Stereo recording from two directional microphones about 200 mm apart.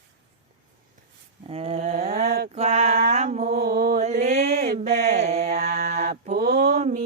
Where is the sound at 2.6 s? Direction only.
35° right (ahead or behind); by 4.0 s 50° right (ahead or behind).